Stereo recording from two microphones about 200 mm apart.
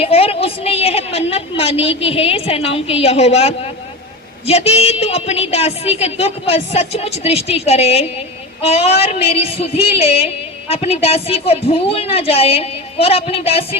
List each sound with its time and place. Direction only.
0.0 s a woman's voice: 30° left (ahead or behind)